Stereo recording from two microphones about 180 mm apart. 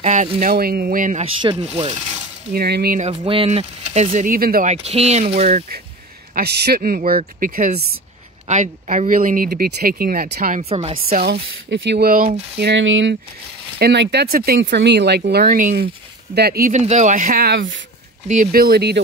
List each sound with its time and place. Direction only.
0.0 s speech: 40° right (ahead or behind)
1.2 s speech: 25° right (ahead or behind)
1.6 s speech: 35° right (ahead or behind)
2.5 s speech: 60° right (ahead or behind)
3.0 s speech: 35° right (ahead or behind); by 4.6 s 55° right (ahead or behind)
4.6 s speech: 35° right (ahead or behind)
6.3 s speech: 65° right (ahead or behind)
8.5 s speech: 40° right (ahead or behind)
10.6 s speech: 35° right (ahead or behind)
11.1 s speech: 60° right (ahead or behind)
12.1 s speech: 50° right (ahead or behind); by 13.1 s 90° right
13.7 s speech: 60° right (ahead or behind)
16.8 s speech: 40° right (ahead or behind); by 17.8 s 90° right
18.3 s speech: 50° right (ahead or behind)